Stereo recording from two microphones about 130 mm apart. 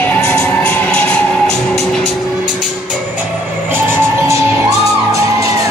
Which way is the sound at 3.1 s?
15° right (ahead or behind).